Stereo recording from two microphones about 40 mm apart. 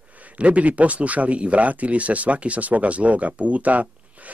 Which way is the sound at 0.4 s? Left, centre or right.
Right.